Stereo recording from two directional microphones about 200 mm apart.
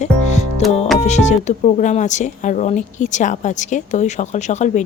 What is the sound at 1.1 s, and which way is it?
Speech, 35° left (ahead or behind).